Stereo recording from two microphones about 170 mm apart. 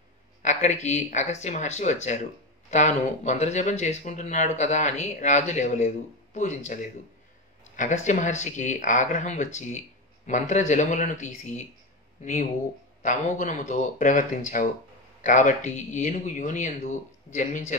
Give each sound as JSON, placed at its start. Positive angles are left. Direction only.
{"t": 0.4, "sound": "speech", "side_deg": 45}